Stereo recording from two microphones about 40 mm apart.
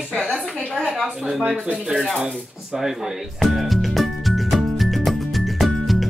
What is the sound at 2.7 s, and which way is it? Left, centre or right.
Speech, centre.